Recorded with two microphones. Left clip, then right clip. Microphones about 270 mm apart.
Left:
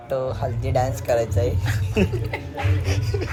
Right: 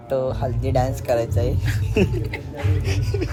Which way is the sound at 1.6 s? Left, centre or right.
Centre.